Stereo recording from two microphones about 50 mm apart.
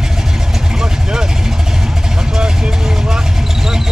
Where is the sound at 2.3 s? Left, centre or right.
Centre.